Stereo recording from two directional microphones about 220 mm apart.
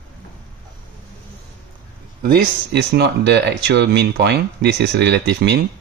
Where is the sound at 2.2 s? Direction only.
45° right (ahead or behind).